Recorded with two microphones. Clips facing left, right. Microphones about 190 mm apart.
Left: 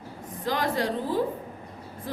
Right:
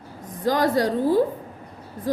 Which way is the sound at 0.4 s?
40° right (ahead or behind).